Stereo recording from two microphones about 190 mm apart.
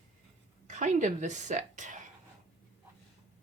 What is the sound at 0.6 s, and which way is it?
A woman's voice, 40° right (ahead or behind).